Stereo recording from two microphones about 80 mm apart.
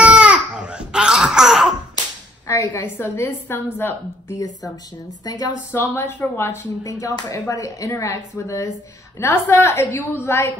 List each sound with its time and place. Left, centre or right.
0.0 s wail: centre
2.4 s a woman's voice: left
5.2 s a woman's voice: left
5.7 s speech: left
9.2 s speech: left